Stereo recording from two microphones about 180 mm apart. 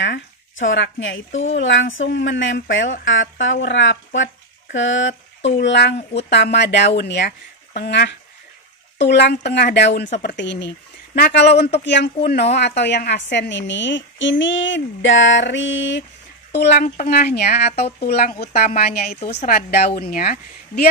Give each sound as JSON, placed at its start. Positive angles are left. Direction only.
{"t": 0.0, "sound": "speech", "side_deg": 90}
{"t": 5.6, "sound": "a woman's voice", "side_deg": 75}
{"t": 11.1, "sound": "a woman's voice", "side_deg": 65}
{"t": 16.5, "sound": "a woman's voice", "side_deg": 70}
{"t": 16.8, "sound": "speech", "side_deg": 50}